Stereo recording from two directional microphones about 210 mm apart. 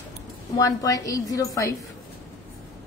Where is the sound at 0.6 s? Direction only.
15° left (ahead or behind).